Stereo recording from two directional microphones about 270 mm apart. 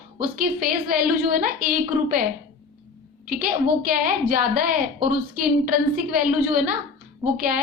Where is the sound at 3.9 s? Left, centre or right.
Right.